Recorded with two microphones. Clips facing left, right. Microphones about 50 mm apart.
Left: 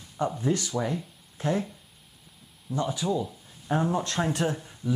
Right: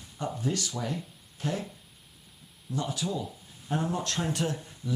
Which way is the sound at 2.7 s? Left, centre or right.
Centre.